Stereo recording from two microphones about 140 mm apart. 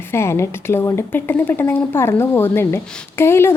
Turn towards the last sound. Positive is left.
turn(degrees=15)  # may be behind; listen again after turning